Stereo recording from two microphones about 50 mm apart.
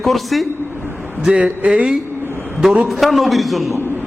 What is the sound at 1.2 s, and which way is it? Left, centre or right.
Speech, centre.